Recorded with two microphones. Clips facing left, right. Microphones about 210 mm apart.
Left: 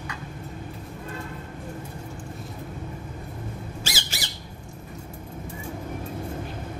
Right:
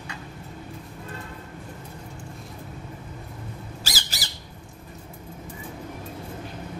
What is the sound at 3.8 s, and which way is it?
Squawk, 40° right (ahead or behind).